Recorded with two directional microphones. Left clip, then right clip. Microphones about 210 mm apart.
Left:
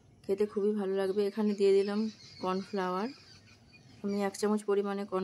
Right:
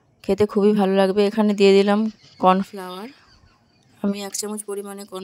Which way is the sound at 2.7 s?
Centre (ahead or behind).